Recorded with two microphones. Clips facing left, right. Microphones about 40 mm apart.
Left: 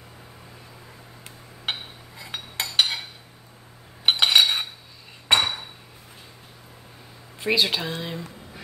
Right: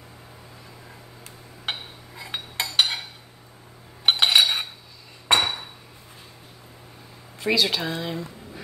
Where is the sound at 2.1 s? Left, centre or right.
Centre.